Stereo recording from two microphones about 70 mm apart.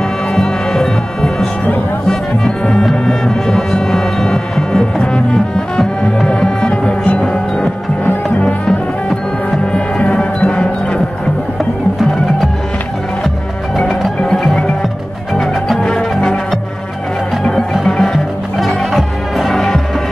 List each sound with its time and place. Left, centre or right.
0.4 s music: centre
13.7 s music: centre
17.4 s music: centre